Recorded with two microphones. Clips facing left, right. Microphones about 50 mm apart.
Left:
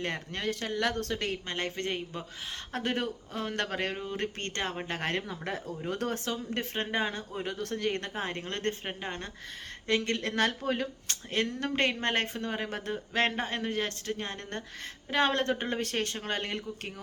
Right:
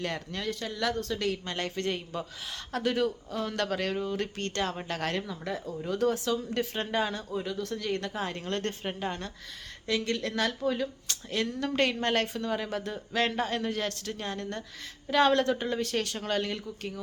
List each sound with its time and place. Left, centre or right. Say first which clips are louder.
0.0 s speech: even; left
1.2 s speech: right 2 dB; left
9.8 s speech: even; left
11.8 s speech: right 2 dB; left